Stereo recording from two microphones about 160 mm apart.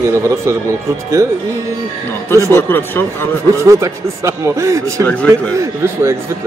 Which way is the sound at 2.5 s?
15° left (ahead or behind).